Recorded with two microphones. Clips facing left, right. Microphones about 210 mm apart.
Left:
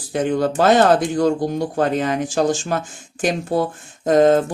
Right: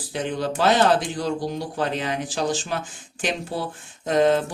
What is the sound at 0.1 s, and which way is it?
Speech, 45° left (ahead or behind).